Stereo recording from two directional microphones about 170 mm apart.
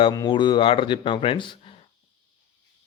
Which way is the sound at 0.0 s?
25° left (ahead or behind).